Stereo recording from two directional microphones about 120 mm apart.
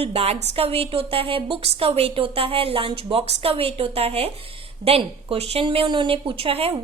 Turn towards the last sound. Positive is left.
turn(degrees=-50)  # may be behind; listen again after turning